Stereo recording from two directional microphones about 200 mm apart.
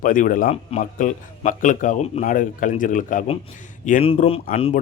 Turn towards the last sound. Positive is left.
turn(degrees=30)  # may be behind; listen again after turning